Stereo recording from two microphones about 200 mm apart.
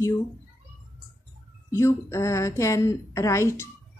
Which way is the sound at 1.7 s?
15° left (ahead or behind).